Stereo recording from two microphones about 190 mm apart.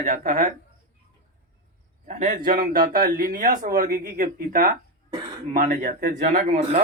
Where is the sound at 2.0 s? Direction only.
40° right (ahead or behind).